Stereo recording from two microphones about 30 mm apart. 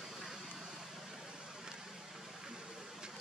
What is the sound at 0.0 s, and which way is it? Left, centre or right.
Vehicle, centre.